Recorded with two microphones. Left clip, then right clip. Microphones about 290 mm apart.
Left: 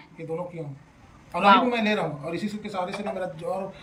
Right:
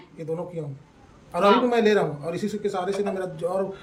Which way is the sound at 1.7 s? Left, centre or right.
Centre.